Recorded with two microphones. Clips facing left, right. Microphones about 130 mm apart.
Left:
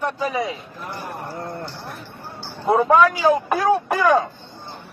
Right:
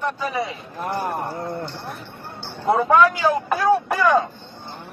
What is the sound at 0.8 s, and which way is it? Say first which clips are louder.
Speech: right 7 dB; 60° right (ahead or behind).